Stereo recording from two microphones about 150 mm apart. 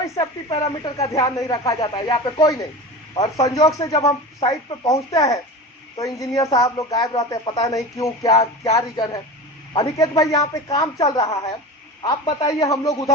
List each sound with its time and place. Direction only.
0.0 s speech: 25° left (ahead or behind)